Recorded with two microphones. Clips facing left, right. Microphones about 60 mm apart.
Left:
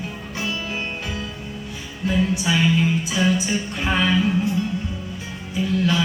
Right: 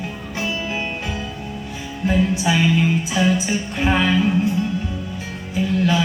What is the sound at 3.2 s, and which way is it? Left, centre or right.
Music, centre.